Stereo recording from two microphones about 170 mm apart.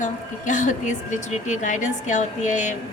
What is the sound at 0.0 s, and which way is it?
A woman's voice, 45° left (ahead or behind).